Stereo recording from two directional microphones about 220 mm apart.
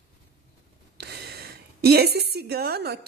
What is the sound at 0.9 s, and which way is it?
A woman's voice, 45° right (ahead or behind).